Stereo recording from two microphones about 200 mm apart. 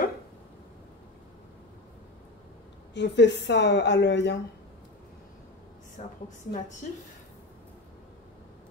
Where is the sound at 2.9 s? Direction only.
60° left (ahead or behind).